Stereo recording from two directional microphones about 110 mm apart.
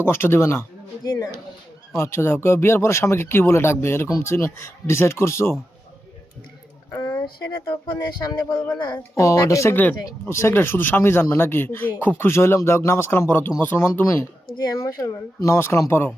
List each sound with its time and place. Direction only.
0.0 s speech: 20° left (ahead or behind)
1.0 s speech: 35° left (ahead or behind)
2.0 s speech: 25° left (ahead or behind)
6.9 s a sound: 40° left (ahead or behind)
7.6 s speech: 40° left (ahead or behind); by 14.3 s 20° left (ahead or behind)
14.6 s speech: 30° left (ahead or behind)